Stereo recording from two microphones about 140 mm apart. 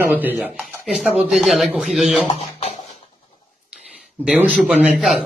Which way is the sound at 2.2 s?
55° left (ahead or behind).